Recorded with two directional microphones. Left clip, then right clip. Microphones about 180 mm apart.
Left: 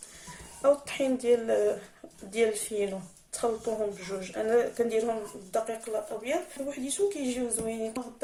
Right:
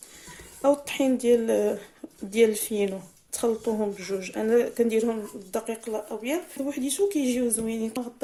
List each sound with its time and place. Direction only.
0.6 s a woman's voice: 45° right (ahead or behind)